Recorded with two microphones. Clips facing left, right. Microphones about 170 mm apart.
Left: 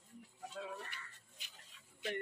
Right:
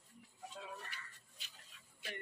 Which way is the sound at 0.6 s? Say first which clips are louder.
Left 5 dB; 55° left (ahead or behind).